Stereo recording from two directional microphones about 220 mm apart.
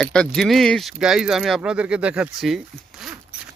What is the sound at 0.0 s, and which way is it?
Speech, 5° left (ahead or behind).